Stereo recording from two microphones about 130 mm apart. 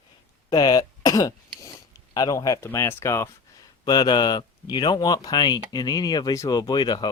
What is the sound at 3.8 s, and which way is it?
Speech, 30° left (ahead or behind).